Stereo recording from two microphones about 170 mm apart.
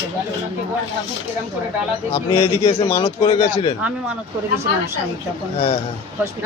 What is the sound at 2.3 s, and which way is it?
Speech, 25° left (ahead or behind).